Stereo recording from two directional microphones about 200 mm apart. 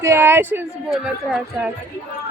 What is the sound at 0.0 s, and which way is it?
A woman's voice, 15° right (ahead or behind).